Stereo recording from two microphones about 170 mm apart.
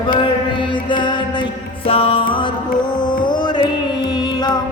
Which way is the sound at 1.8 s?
35° left (ahead or behind).